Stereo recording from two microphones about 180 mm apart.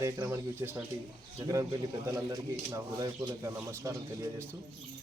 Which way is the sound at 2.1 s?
20° right (ahead or behind).